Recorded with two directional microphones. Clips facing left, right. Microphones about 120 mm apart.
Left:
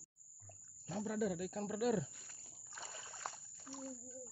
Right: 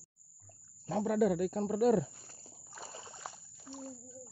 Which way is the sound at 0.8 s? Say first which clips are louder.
Right 9 dB; 70° right (ahead or behind).